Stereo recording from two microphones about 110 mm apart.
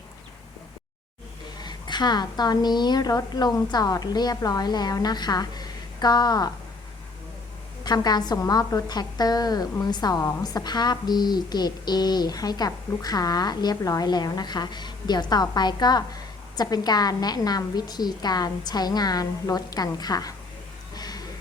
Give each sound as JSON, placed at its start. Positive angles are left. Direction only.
{"t": 1.6, "sound": "a woman's voice", "side_deg": 40}
{"t": 7.9, "sound": "a woman's voice", "side_deg": 40}
{"t": 20.9, "sound": "a sound", "side_deg": 35}